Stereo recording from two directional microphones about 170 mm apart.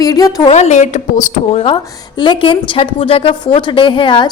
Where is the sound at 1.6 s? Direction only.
25° left (ahead or behind).